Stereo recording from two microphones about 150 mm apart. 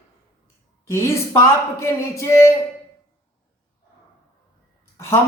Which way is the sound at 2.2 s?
20° left (ahead or behind).